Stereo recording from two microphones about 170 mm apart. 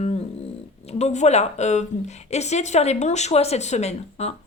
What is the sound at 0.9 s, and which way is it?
A woman's voice, 40° left (ahead or behind).